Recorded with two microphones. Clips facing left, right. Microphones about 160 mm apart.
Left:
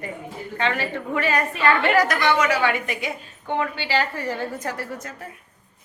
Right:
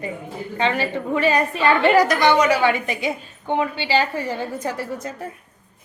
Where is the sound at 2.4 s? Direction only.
25° right (ahead or behind).